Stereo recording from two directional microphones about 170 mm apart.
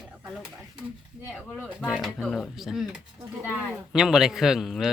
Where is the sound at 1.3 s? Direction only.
5° right (ahead or behind).